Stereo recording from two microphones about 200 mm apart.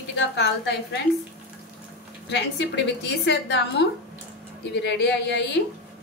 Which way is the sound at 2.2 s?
60° left (ahead or behind).